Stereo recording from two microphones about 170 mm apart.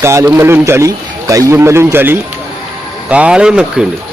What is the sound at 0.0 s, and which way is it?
Speech, 15° right (ahead or behind).